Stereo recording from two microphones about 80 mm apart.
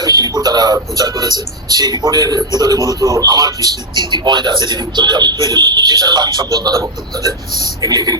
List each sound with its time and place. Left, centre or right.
0.0 s a man's voice: right